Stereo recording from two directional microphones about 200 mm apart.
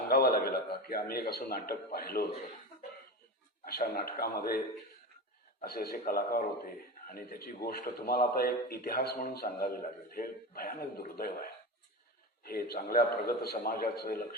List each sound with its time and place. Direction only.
0.1 s speech: 50° left (ahead or behind)
3.6 s speech: 50° left (ahead or behind)
5.6 s speech: 50° left (ahead or behind)